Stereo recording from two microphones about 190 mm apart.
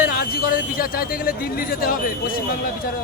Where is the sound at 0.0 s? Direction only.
50° left (ahead or behind).